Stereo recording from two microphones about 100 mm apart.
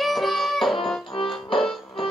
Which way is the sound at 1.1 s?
65° left (ahead or behind).